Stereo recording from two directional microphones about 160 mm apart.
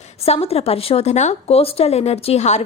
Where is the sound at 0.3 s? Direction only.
40° left (ahead or behind).